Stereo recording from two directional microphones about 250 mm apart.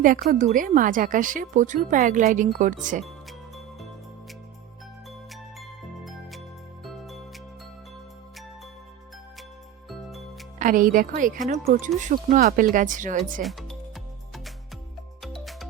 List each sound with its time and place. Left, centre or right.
0.0 s a woman's voice: right
3.0 s music: centre
10.1 s music: centre
10.6 s a woman's voice: right
13.4 s music: centre